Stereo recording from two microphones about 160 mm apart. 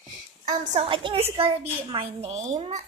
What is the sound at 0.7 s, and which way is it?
A woman's voice, 35° right (ahead or behind).